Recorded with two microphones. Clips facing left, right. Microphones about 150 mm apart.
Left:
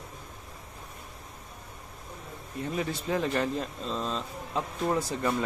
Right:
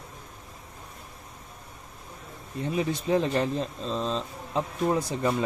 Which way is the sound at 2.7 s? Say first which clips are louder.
Right 5 dB; 20° right (ahead or behind).